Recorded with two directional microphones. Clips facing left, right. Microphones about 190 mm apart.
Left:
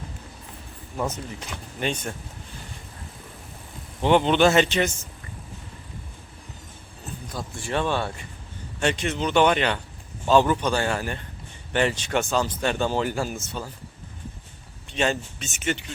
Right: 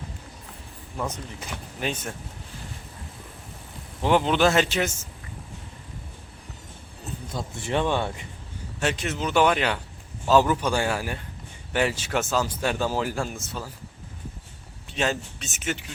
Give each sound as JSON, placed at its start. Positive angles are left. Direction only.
{"t": 0.9, "sound": "speech", "side_deg": 5}
{"t": 4.0, "sound": "speech", "side_deg": -5}
{"t": 7.3, "sound": "speech", "side_deg": -20}
{"t": 8.8, "sound": "speech", "side_deg": -5}
{"t": 14.9, "sound": "speech", "side_deg": 0}